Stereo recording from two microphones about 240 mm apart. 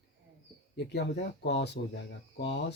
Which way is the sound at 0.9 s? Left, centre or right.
Left.